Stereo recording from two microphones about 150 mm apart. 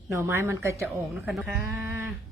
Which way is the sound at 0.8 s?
Centre (ahead or behind).